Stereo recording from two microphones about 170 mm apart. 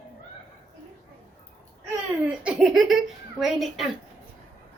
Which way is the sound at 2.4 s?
5° right (ahead or behind).